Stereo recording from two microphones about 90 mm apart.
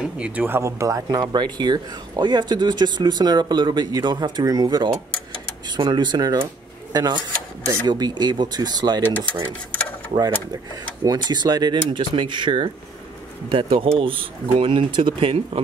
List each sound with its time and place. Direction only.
0.0 s speech: 15° right (ahead or behind)
0.5 s speech: 35° right (ahead or behind)
1.0 s speech: 50° right (ahead or behind)
9.7 s a sound: 20° left (ahead or behind)
11.1 s speech: 55° right (ahead or behind)
13.5 s speech: 80° right